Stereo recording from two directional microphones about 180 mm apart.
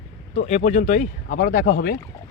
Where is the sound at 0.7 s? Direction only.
40° left (ahead or behind).